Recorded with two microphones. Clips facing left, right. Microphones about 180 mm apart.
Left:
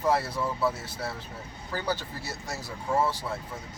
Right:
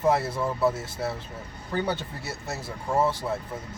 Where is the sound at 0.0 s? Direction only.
25° right (ahead or behind).